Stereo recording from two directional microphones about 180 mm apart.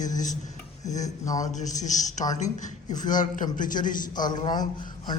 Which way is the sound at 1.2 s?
20° left (ahead or behind).